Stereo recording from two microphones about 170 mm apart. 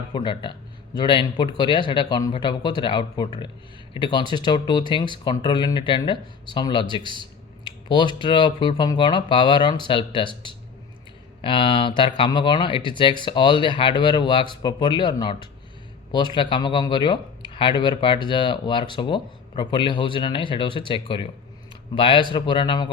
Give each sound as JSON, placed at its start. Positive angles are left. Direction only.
{"t": 0.1, "sound": "speech", "side_deg": 25}